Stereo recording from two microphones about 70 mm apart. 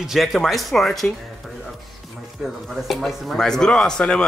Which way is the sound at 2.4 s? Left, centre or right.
Centre.